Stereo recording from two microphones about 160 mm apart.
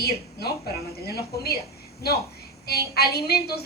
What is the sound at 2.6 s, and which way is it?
Speech, 80° left.